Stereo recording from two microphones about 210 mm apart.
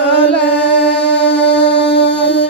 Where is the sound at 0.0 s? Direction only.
55° left (ahead or behind).